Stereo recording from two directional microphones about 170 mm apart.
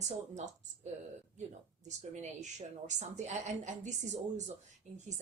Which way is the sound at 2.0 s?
45° right (ahead or behind).